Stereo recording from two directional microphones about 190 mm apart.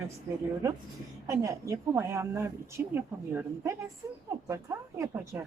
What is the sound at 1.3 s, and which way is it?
Speech, 15° right (ahead or behind).